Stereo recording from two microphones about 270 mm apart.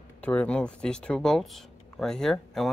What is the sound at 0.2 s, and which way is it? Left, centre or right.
Speech, centre.